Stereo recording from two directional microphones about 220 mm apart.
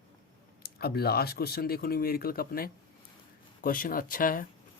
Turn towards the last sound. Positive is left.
turn(degrees=40)  # may be behind; listen again after turning